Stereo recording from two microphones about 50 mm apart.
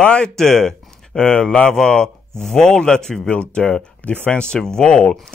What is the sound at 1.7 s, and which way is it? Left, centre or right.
Speech, centre.